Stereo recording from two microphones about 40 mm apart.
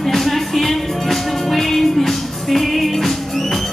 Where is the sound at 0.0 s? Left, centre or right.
Centre.